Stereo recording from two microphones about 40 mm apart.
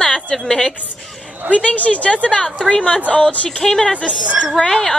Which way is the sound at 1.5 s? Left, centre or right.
Left.